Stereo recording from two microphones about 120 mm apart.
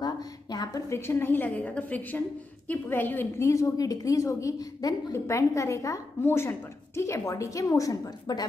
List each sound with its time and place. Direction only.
0.0 s a woman's voice: 35° left (ahead or behind)